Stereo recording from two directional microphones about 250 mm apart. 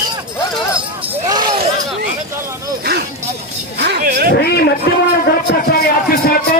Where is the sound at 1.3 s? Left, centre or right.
Centre.